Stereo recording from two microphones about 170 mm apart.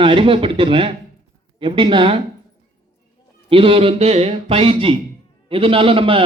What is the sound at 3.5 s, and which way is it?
A man's voice, 35° right (ahead or behind).